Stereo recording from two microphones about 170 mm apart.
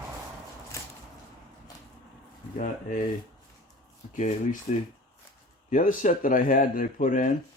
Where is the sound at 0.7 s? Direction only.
15° left (ahead or behind).